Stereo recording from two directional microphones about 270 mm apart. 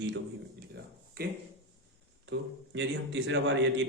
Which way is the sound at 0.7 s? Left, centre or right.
Right.